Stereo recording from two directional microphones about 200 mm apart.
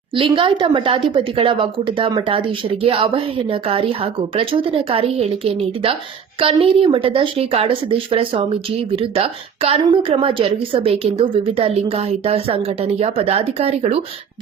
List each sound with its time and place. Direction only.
0.2 s a woman's voice: 25° right (ahead or behind)